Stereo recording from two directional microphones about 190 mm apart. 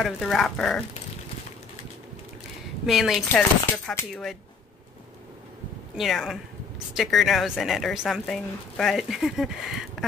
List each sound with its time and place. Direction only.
0.0 s speech: centre (ahead or behind)
2.9 s speech: centre (ahead or behind)
5.9 s speech: centre (ahead or behind)